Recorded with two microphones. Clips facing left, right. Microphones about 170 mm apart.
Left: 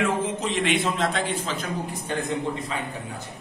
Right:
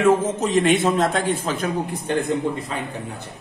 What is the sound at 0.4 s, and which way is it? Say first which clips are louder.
A man's voice: right 6 dB; 45° right (ahead or behind).